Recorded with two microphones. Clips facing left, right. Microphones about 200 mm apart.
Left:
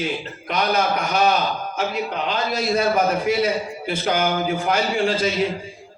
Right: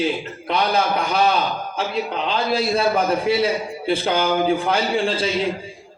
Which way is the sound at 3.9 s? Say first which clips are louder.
Right 2 dB; 30° right (ahead or behind).